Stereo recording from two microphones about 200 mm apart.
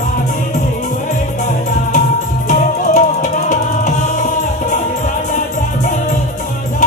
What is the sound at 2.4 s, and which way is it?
Music, 40° left (ahead or behind).